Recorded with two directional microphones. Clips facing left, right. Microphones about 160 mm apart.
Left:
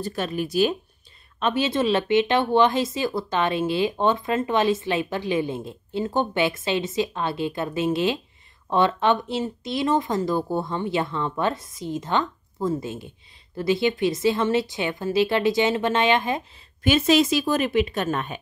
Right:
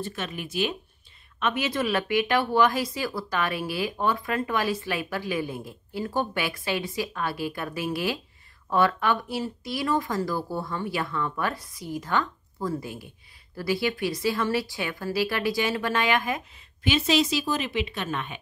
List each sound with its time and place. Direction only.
0.0 s speech: 35° left (ahead or behind)
16.8 s a woman's voice: 50° left (ahead or behind)